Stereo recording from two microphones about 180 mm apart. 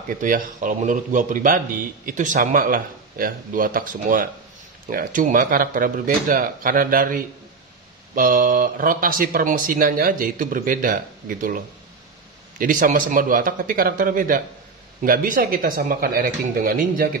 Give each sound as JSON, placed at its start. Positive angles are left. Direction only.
{"t": 0.1, "sound": "speech", "side_deg": -45}